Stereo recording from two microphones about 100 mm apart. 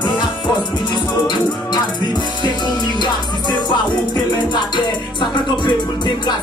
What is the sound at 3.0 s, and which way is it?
Music, 50° left (ahead or behind).